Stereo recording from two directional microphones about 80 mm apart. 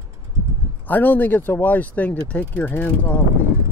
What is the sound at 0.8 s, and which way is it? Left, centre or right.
Speech, left.